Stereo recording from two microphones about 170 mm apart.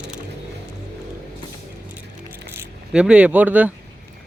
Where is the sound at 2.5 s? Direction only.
10° right (ahead or behind).